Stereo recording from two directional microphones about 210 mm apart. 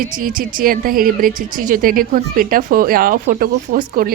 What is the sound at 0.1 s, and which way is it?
Speech, 40° right (ahead or behind).